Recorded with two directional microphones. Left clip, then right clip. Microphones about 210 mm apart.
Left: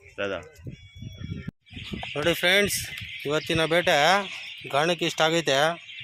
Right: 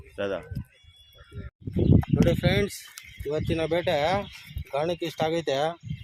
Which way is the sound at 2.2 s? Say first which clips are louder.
Left 7 dB; 5° left (ahead or behind).